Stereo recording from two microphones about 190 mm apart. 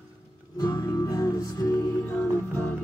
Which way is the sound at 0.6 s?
20° left (ahead or behind).